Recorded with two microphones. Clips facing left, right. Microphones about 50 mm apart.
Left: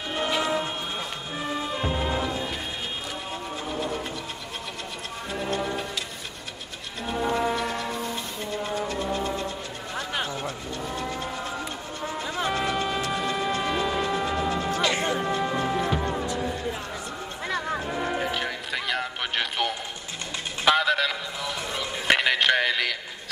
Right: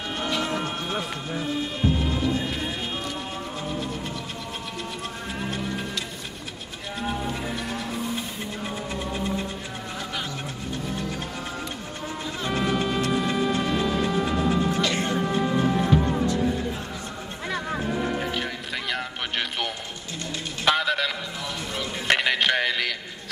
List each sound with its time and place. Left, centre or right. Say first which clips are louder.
0.3 s music: left 1 dB; centre
1.8 s music: right 2 dB; centre
2.3 s music: right 3 dB; centre
7.3 s music: left 6 dB; centre
8.6 s music: left 3 dB; centre
12.4 s music: right 2 dB; centre
20.6 s a sound: left 1 dB; centre